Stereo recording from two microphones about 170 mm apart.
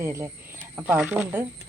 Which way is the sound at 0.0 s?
15° right (ahead or behind).